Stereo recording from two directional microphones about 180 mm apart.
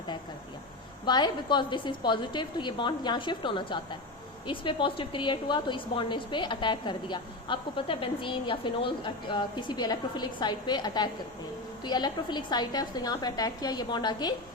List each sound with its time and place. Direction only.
1.0 s a woman's voice: 25° left (ahead or behind)